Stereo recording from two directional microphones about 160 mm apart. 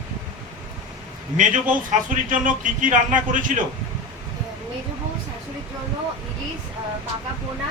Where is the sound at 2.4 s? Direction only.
55° right (ahead or behind).